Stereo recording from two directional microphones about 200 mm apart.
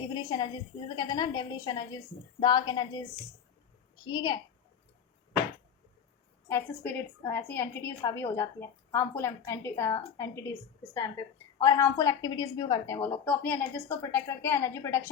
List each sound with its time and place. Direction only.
0.1 s a woman's voice: 20° left (ahead or behind)
4.0 s a woman's voice: 20° left (ahead or behind)
6.8 s a woman's voice: 10° left (ahead or behind)
11.6 s a woman's voice: 15° left (ahead or behind)